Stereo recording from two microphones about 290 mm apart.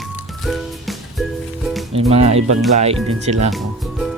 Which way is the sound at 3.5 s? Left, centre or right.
Centre.